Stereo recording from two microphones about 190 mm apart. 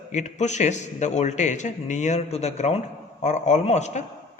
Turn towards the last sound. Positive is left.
turn(degrees=35)  # may be behind; listen again after turning